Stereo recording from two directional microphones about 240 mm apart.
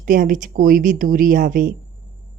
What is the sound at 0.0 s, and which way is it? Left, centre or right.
Speech, right.